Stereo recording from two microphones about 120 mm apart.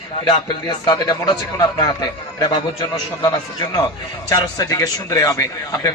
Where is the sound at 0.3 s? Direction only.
40° left (ahead or behind).